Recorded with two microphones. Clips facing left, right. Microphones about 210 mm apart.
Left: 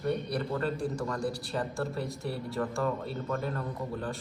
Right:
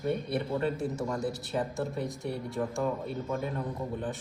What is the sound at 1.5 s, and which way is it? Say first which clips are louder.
Speech: right 3 dB; centre (ahead or behind).